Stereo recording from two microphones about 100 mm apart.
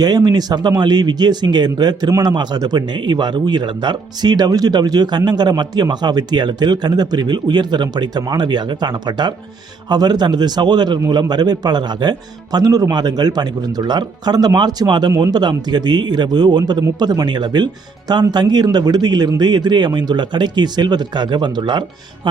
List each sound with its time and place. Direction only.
0.0 s speech: 40° right (ahead or behind)